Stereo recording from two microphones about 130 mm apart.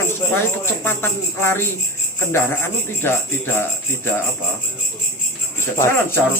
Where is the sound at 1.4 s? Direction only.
15° left (ahead or behind).